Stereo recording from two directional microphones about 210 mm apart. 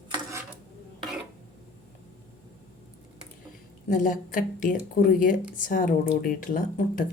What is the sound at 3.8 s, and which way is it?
Speech, 40° left (ahead or behind).